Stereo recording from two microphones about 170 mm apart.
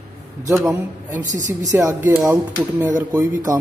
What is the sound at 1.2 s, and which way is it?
Speech, 45° right (ahead or behind).